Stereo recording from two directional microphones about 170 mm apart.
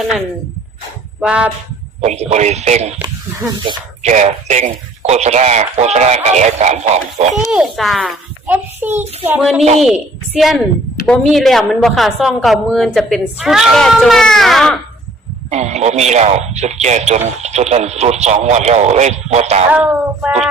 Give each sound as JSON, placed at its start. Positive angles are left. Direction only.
{"t": 1.2, "sound": "speech", "side_deg": -5}
{"t": 2.0, "sound": "speech", "side_deg": -40}
{"t": 3.0, "sound": "speech", "side_deg": -20}
{"t": 4.0, "sound": "speech", "side_deg": -45}
{"t": 7.5, "sound": "a woman's voice", "side_deg": 0}
{"t": 9.4, "sound": "a woman's voice", "side_deg": 0}
{"t": 15.4, "sound": "speech", "side_deg": -40}
{"t": 19.7, "sound": "speech", "side_deg": -10}